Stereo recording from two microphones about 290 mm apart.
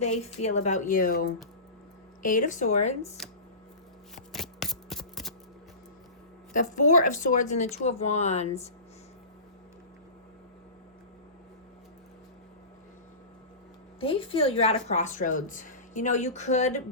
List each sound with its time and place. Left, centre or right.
0.0 s speech: left
2.2 s speech: left
3.2 s speech: centre
4.1 s shuffling cards: centre
6.5 s speech: left
14.0 s speech: centre